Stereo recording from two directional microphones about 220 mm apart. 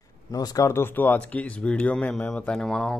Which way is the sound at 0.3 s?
15° left (ahead or behind).